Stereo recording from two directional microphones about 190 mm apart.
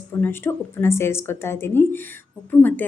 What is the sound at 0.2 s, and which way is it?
A woman's voice, 10° left (ahead or behind).